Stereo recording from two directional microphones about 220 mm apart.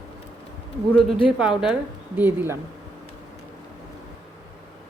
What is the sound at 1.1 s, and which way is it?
A woman's voice, 5° right (ahead or behind).